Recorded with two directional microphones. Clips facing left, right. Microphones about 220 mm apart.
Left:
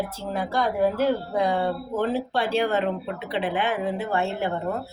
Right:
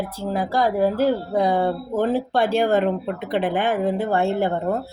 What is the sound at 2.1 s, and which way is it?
Speech, 50° right (ahead or behind).